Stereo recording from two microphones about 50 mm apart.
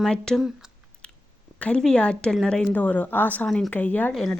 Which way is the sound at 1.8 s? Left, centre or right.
Centre.